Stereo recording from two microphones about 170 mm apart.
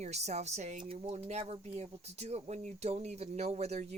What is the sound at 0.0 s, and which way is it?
A woman's voice, 40° right (ahead or behind).